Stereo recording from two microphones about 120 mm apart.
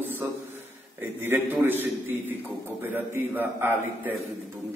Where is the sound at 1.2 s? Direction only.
20° right (ahead or behind).